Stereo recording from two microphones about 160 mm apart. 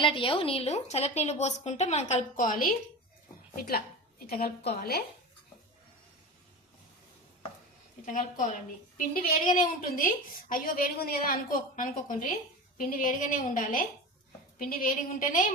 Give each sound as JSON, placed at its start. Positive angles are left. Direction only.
{"t": 0.0, "sound": "a woman's voice", "side_deg": 35}
{"t": 8.0, "sound": "a woman's voice", "side_deg": 55}